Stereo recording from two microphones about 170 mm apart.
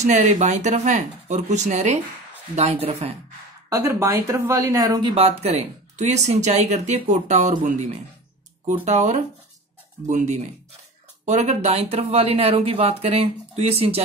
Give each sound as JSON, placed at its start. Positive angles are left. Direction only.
{"t": 0.0, "sound": "speech", "side_deg": -45}
{"t": 3.7, "sound": "a woman's voice", "side_deg": -20}
{"t": 5.1, "sound": "speech", "side_deg": -35}